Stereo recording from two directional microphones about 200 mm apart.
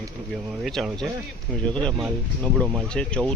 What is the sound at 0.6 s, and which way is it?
Speech, centre (ahead or behind).